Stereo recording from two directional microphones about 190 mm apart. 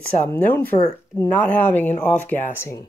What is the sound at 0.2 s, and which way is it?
Speech, 10° left (ahead or behind).